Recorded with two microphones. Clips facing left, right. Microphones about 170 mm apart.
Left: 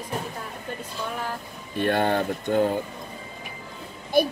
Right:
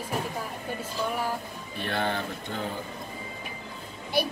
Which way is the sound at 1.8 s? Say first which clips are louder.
Left 7 dB; 50° left (ahead or behind).